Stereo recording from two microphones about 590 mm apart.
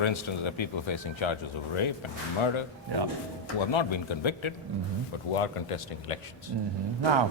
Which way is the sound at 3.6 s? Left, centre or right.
Left.